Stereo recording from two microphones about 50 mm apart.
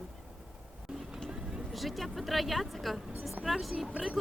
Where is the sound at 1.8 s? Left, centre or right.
Centre.